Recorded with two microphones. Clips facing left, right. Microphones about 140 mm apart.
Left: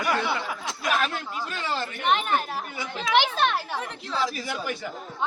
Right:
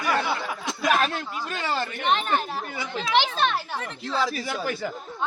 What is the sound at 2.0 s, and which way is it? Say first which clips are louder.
A woman's voice: left 1 dB; 10° left (ahead or behind).